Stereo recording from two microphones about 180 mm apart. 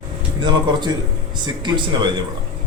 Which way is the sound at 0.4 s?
25° right (ahead or behind).